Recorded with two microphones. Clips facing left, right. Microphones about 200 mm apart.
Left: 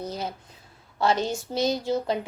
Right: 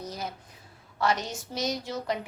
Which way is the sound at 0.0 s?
30° left (ahead or behind).